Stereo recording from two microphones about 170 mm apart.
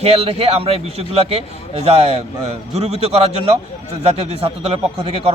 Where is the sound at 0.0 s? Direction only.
35° right (ahead or behind).